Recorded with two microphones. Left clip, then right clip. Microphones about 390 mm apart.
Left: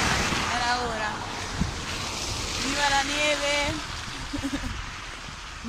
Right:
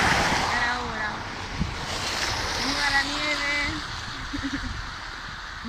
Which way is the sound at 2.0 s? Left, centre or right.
Centre.